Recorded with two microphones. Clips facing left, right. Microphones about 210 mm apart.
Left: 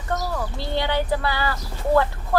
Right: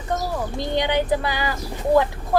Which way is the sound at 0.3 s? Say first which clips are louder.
Right 3 dB; 15° right (ahead or behind).